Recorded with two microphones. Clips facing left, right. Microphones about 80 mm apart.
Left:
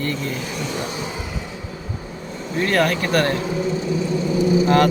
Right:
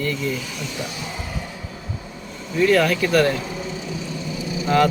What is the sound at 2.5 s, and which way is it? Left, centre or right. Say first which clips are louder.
Speech: right 2 dB; left.